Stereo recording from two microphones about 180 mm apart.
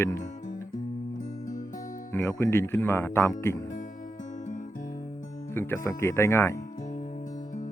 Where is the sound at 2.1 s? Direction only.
15° left (ahead or behind).